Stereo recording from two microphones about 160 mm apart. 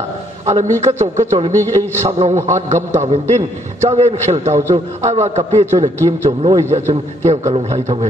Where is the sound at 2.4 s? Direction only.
20° right (ahead or behind).